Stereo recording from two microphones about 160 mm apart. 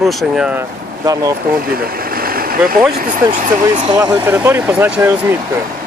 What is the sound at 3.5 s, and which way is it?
Speech, 25° right (ahead or behind).